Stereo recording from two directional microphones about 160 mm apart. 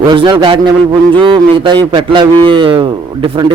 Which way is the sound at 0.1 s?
30° right (ahead or behind).